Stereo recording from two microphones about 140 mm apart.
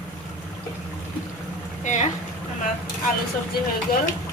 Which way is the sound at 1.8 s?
60° left (ahead or behind).